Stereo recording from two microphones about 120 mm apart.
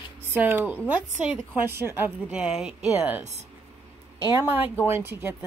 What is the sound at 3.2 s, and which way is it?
Speech, 70° right (ahead or behind).